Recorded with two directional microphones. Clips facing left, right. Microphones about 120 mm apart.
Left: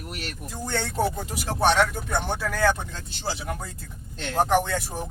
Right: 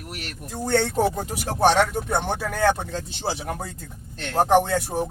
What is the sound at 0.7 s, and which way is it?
Speech, 70° right (ahead or behind).